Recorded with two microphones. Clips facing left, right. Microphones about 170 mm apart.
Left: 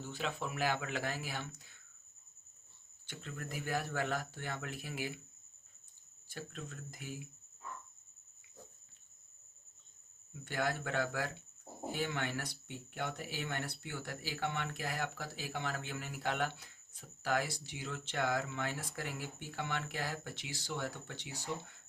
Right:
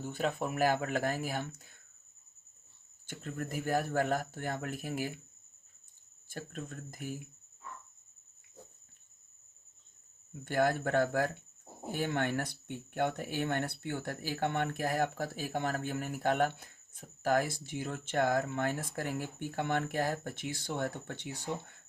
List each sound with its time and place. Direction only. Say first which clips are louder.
0.0 s speech: right 6 dB; 50° right (ahead or behind)
3.1 s speech: right 6 dB; 45° right (ahead or behind)
6.2 s speech: right 4 dB; 45° right (ahead or behind)
10.4 s speech: right 7 dB; 50° right (ahead or behind)